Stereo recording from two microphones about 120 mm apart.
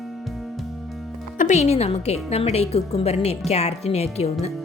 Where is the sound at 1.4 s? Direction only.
75° left (ahead or behind).